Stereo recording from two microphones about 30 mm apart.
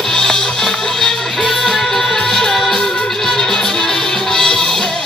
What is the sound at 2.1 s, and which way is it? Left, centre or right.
Music, left.